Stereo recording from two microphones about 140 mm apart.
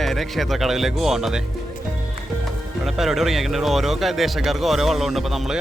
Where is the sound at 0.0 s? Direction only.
Centre (ahead or behind).